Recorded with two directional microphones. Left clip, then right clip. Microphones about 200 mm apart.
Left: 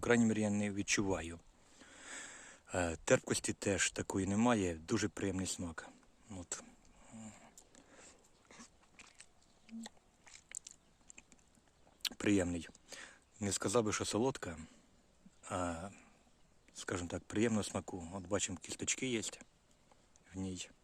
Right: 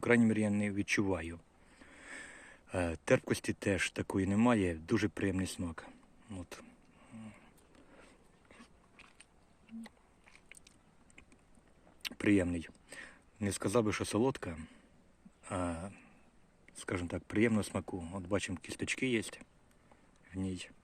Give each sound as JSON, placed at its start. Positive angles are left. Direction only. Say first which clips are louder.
{"t": 0.0, "sound": "speech", "louder": "right 3 dB", "side_deg": 5}
{"t": 8.4, "sound": "biting", "louder": "left 1 dB", "side_deg": 20}
{"t": 10.5, "sound": "a sound", "louder": "left 5 dB", "side_deg": 20}
{"t": 12.0, "sound": "speech", "louder": "right 3 dB", "side_deg": 5}
{"t": 15.4, "sound": "a sound", "louder": "right 1 dB", "side_deg": 5}
{"t": 16.6, "sound": "speech", "louder": "right 2 dB", "side_deg": 5}